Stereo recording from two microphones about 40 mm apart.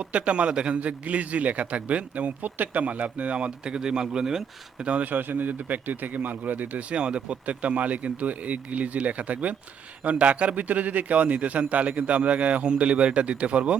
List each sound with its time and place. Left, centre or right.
0.0 s a man's voice: right
3.6 s speech: centre
5.0 s a man's voice: right
6.7 s a man's voice: right